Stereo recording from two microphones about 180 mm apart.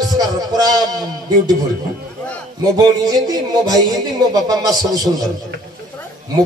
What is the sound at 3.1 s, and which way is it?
Music, 20° right (ahead or behind).